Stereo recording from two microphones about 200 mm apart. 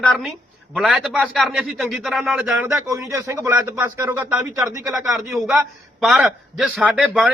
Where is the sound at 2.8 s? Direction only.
15° right (ahead or behind).